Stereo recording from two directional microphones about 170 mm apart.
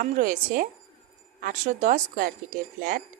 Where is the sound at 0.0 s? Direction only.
50° right (ahead or behind).